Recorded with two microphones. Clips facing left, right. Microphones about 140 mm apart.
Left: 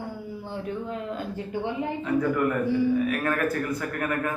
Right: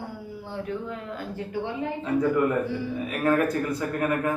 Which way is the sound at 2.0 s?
20° right (ahead or behind).